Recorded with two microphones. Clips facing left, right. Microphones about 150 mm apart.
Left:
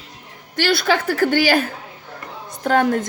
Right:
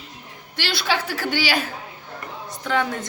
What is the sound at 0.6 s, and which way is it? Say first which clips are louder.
A woman's voice: left 6 dB; 50° left (ahead or behind).